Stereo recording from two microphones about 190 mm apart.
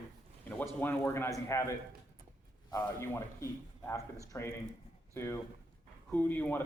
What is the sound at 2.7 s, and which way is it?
Speech, 15° left (ahead or behind).